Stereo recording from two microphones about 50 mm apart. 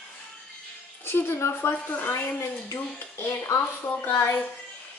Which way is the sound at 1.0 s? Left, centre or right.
Left.